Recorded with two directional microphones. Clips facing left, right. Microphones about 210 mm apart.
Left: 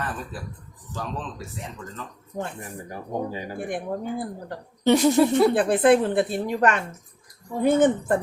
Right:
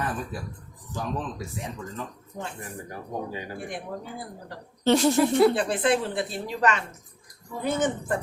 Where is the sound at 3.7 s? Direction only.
55° left (ahead or behind).